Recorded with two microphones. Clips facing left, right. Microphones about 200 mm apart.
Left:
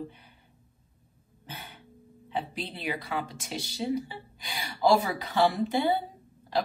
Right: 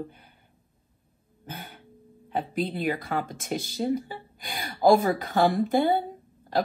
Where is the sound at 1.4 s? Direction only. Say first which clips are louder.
Right 4 dB; 50° right (ahead or behind).